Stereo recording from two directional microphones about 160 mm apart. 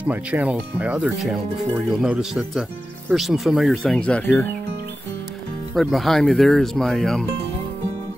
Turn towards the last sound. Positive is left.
turn(degrees=5)  # may be behind; listen again after turning